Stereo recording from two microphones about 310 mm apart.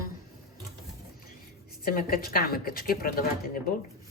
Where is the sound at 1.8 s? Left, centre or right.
Left.